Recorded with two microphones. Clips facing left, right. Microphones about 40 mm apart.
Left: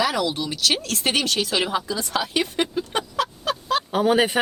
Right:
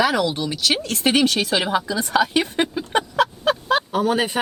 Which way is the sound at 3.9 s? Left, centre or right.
Centre.